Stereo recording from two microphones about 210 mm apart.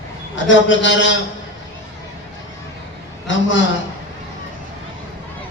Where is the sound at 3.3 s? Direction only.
60° left (ahead or behind).